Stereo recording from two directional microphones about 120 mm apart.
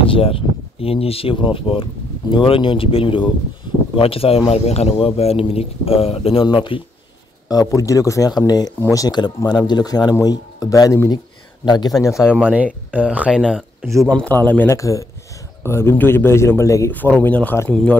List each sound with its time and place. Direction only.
0.0 s speech: 50° left (ahead or behind)
7.4 s speech: 30° left (ahead or behind)
12.0 s a man's voice: 25° left (ahead or behind)
12.4 s speech: 10° right (ahead or behind)
14.1 s speech: 10° left (ahead or behind)
14.8 s a man's voice: 25° left (ahead or behind)
16.9 s speech: 15° left (ahead or behind)